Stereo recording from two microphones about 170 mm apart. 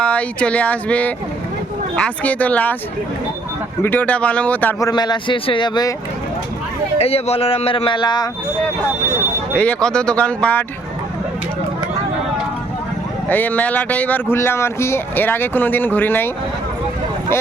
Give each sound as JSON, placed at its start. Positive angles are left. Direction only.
{"t": 0.0, "sound": "speech", "side_deg": 5}
{"t": 3.8, "sound": "speech", "side_deg": 10}
{"t": 4.8, "sound": "a man's voice", "side_deg": 25}
{"t": 7.0, "sound": "speech", "side_deg": 35}
{"t": 9.6, "sound": "speech", "side_deg": 5}
{"t": 13.2, "sound": "speech", "side_deg": 10}